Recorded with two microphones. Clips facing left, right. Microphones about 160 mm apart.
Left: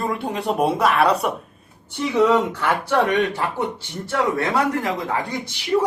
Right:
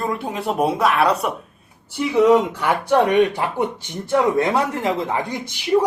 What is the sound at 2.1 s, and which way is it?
Speech, 15° right (ahead or behind).